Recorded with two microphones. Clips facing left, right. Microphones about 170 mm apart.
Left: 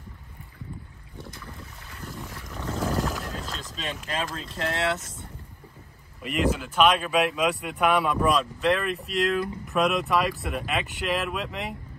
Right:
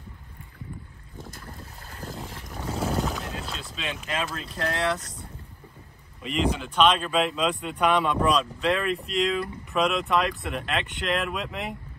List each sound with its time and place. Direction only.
1.9 s boat: 40° right (ahead or behind)
2.2 s boat: 30° right (ahead or behind)
2.8 s boat: centre (ahead or behind)
3.6 s boat: 40° left (ahead or behind)
4.4 s speech: 25° left (ahead or behind)
6.2 s speech: centre (ahead or behind)